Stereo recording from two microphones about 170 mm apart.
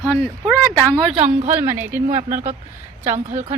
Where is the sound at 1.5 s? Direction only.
15° right (ahead or behind).